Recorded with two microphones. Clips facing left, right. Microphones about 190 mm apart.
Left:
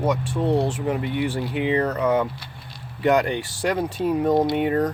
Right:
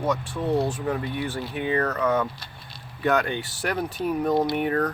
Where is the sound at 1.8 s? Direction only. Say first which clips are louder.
Left 3 dB; 15° left (ahead or behind).